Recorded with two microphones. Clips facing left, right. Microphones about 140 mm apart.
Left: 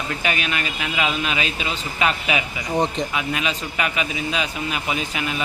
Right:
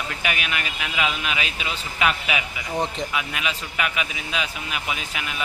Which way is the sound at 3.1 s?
35° left (ahead or behind).